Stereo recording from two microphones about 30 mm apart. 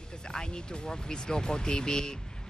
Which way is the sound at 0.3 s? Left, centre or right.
Left.